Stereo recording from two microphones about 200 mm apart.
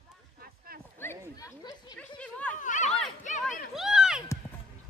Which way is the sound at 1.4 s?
20° left (ahead or behind).